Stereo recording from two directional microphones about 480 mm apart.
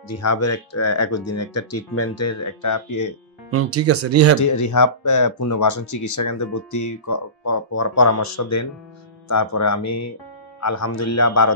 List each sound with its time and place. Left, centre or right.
0.1 s speech: left
3.5 s speech: right
4.4 s speech: left